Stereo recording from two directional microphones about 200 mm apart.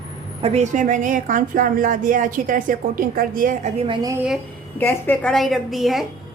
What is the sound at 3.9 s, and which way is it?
Speech, 15° right (ahead or behind).